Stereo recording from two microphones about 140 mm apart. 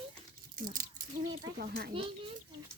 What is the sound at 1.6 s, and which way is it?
Speech, 90° right.